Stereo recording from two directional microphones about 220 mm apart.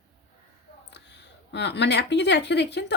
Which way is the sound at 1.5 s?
50° left (ahead or behind).